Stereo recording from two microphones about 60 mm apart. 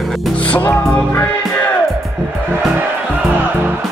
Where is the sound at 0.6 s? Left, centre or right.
Left.